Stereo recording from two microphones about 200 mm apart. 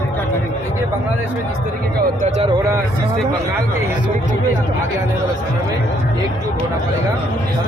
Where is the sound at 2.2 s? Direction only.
35° right (ahead or behind).